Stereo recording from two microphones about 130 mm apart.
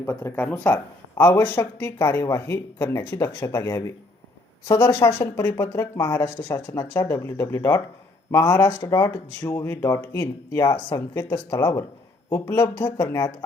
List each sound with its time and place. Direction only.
0.1 s speech: 15° left (ahead or behind)
4.9 s speech: 20° left (ahead or behind)